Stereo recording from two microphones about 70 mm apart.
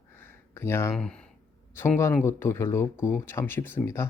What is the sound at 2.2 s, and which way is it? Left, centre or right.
Speech, left.